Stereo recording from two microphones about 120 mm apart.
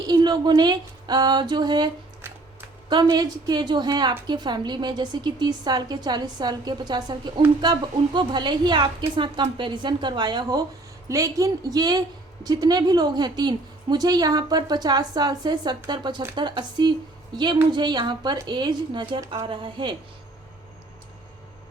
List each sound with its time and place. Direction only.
0.1 s a woman's voice: 35° right (ahead or behind)
2.2 s a sound: 20° right (ahead or behind)
2.9 s a woman's voice: 40° right (ahead or behind)